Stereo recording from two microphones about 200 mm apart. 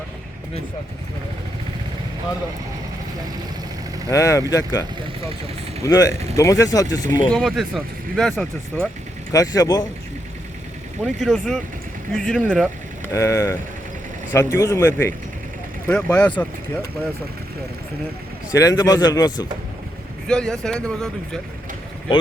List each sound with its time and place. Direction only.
4.1 s speech: 15° left (ahead or behind)
7.3 s speech: centre (ahead or behind)
9.3 s speech: 15° left (ahead or behind)
11.0 s speech: centre (ahead or behind)
13.1 s speech: 15° left (ahead or behind)
18.5 s speech: 15° left (ahead or behind)
20.2 s speech: 5° left (ahead or behind)